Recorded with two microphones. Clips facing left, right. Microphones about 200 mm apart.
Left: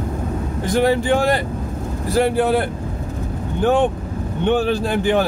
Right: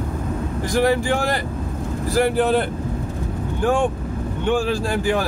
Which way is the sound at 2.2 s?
10° left (ahead or behind).